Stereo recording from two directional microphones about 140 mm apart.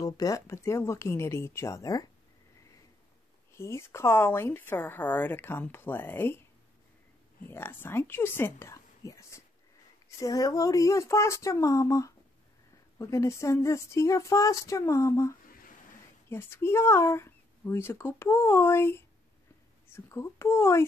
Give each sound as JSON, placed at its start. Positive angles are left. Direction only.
{"t": 0.0, "sound": "speech", "side_deg": 25}
{"t": 3.5, "sound": "a woman's voice", "side_deg": 20}
{"t": 7.4, "sound": "a woman's voice", "side_deg": 15}